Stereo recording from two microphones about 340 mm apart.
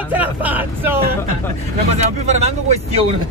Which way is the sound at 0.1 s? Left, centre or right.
Centre.